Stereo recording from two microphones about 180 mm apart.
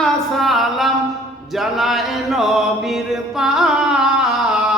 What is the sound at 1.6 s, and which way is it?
Mantra, centre (ahead or behind).